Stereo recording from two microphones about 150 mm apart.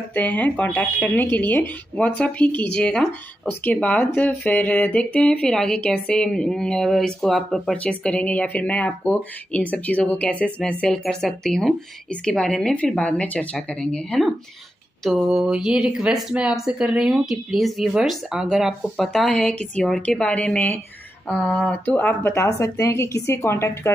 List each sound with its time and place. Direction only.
0.1 s speech: 10° left (ahead or behind)